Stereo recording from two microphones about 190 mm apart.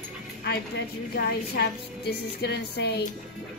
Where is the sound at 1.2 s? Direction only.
60° left (ahead or behind).